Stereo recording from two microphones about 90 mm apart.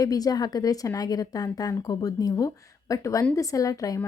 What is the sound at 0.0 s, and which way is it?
A woman's voice, 45° left (ahead or behind).